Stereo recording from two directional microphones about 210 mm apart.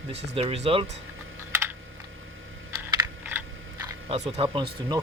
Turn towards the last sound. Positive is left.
turn(degrees=-20)  # may be behind; listen again after turning